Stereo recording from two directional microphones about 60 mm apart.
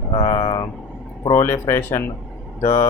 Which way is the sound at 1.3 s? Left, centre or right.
Left.